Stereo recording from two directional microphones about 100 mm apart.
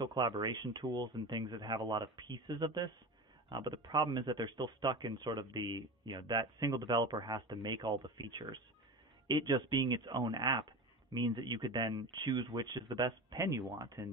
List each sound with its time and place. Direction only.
0.0 s speech: 45° right (ahead or behind)